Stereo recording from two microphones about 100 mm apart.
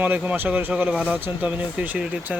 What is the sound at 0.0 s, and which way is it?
Speech, 15° right (ahead or behind).